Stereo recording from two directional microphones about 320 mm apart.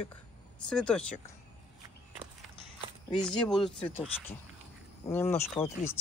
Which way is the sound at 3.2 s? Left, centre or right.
Centre.